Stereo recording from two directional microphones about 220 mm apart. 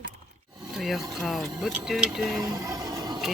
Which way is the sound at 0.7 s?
Centre (ahead or behind).